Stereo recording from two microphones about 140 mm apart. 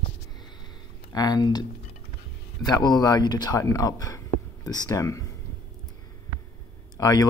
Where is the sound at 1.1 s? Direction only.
30° left (ahead or behind).